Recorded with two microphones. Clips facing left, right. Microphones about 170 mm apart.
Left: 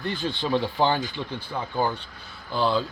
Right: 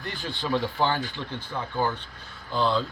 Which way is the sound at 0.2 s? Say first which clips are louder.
Left 1 dB; 20° left (ahead or behind).